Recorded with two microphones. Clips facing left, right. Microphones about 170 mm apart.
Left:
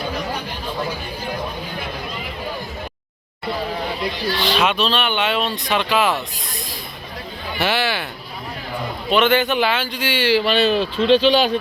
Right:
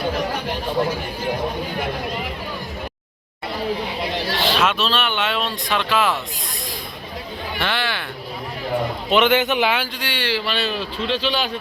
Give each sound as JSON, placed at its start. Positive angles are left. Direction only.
{"t": 4.4, "sound": "speech", "side_deg": 0}
{"t": 7.6, "sound": "speech", "side_deg": 5}
{"t": 9.0, "sound": "speech", "side_deg": -20}
{"t": 10.0, "sound": "speech", "side_deg": 5}
{"t": 10.4, "sound": "speech", "side_deg": 20}